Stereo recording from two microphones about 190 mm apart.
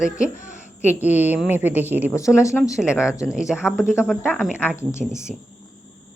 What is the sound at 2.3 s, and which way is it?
Speech, 15° left (ahead or behind).